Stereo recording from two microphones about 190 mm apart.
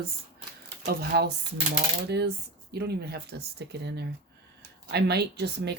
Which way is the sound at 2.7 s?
60° right (ahead or behind).